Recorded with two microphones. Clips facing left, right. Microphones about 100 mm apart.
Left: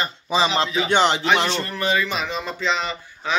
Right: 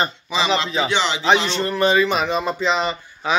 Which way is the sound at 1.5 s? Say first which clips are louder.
Right 5 dB; 25° right (ahead or behind).